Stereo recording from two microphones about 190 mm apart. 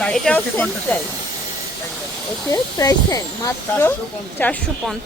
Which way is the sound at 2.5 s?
15° left (ahead or behind).